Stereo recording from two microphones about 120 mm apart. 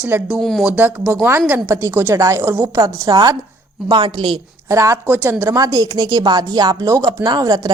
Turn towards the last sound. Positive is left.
turn(degrees=-35)  # may be behind; listen again after turning